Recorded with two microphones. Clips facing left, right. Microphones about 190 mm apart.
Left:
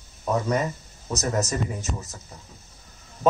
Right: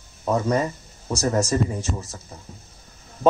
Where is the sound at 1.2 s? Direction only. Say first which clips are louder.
Right 5 dB; 30° right (ahead or behind).